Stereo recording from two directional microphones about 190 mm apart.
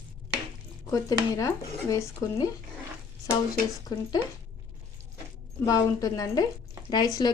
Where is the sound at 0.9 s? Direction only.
15° left (ahead or behind).